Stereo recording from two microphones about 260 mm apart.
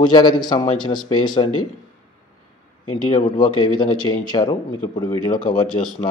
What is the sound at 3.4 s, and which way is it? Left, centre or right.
A man's voice, centre.